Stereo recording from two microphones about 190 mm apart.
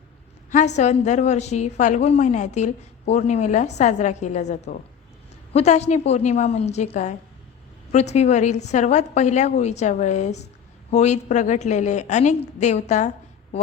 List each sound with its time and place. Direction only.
0.5 s a woman's voice: 35° left (ahead or behind)